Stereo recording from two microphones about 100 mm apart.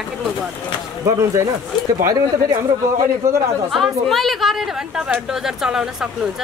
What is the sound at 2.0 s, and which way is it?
A man's voice, 30° right (ahead or behind).